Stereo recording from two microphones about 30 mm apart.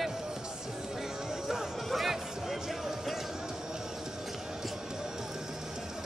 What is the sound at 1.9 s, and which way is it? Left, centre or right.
Music, centre.